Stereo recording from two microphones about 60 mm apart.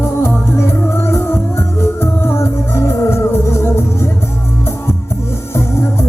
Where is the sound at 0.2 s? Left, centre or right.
Left.